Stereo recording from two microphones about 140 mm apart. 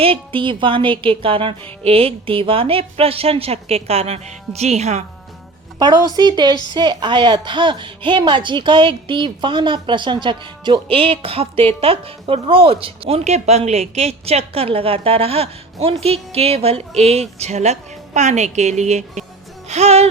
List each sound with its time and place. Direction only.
0.0 s a woman's voice: 40° right (ahead or behind)
6.1 s a woman's voice: 30° right (ahead or behind); by 19.2 s 55° right (ahead or behind)
19.6 s music: 55° right (ahead or behind)